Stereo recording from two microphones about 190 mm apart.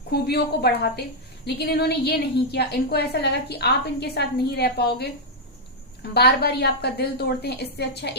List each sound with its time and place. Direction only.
0.1 s a woman's voice: 60° left (ahead or behind)